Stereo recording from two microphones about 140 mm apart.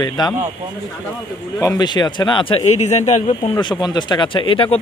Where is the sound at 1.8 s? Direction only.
30° left (ahead or behind); by 3.5 s 55° left (ahead or behind).